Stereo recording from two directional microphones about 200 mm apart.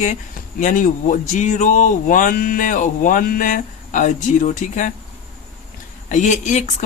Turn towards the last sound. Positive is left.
turn(degrees=40)  # may be behind; listen again after turning